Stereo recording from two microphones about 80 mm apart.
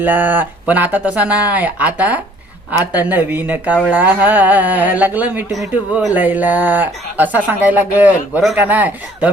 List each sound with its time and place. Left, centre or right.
0.0 s speech: right